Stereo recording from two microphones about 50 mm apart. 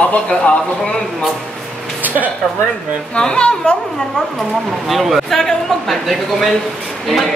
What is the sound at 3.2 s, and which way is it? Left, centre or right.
Speech, centre.